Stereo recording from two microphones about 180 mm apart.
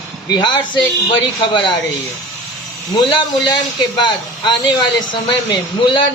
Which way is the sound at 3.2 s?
25° left (ahead or behind).